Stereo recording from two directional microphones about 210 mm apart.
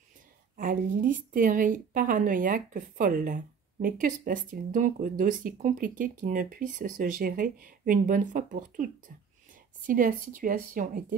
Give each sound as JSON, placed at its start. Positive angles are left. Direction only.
{"t": 0.6, "sound": "speech", "side_deg": -40}